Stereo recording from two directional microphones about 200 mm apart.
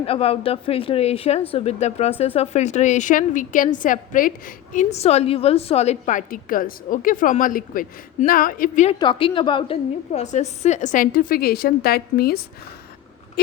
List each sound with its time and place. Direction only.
0.0 s speech: 30° left (ahead or behind)
9.0 s speech: 25° left (ahead or behind); by 12.4 s 50° left (ahead or behind)